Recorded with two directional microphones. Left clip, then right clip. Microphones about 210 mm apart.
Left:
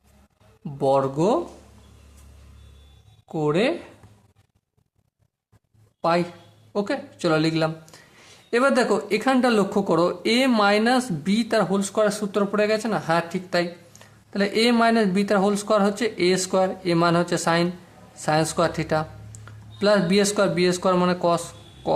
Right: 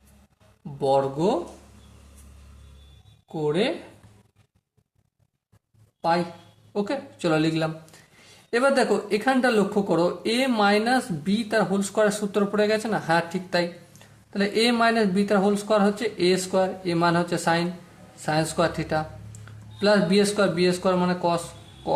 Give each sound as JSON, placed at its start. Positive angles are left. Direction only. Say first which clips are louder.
{"t": 0.8, "sound": "speech", "louder": "left 2 dB", "side_deg": 25}
{"t": 3.3, "sound": "speech", "louder": "left 2 dB", "side_deg": 25}
{"t": 6.0, "sound": "a man's voice", "louder": "left 2 dB", "side_deg": 20}